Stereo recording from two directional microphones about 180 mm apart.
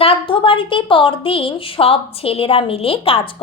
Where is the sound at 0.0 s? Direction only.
30° left (ahead or behind).